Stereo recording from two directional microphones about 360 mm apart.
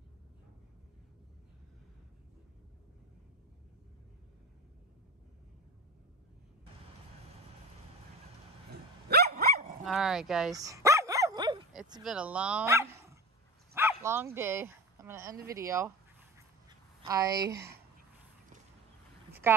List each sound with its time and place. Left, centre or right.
9.1 s dog: right
9.8 s dog: centre
11.7 s speech: centre
17.1 s speech: centre
19.4 s a woman's voice: centre